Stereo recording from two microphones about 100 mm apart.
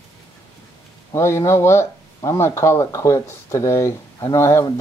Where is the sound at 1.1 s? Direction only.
30° left (ahead or behind).